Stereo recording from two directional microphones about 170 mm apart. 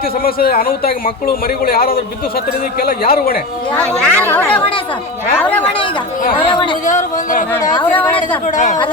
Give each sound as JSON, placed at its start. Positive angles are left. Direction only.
{"t": 0.2, "sound": "a man's voice", "side_deg": 60}
{"t": 3.8, "sound": "speech", "side_deg": 10}
{"t": 6.5, "sound": "speech", "side_deg": 30}
{"t": 6.8, "sound": "speech", "side_deg": 50}
{"t": 7.5, "sound": "speech", "side_deg": 20}
{"t": 7.9, "sound": "speech", "side_deg": 10}
{"t": 8.4, "sound": "speech", "side_deg": 45}